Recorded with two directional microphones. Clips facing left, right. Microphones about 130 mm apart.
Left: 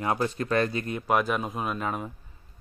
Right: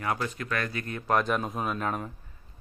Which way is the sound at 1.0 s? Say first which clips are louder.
Even; 5° left (ahead or behind).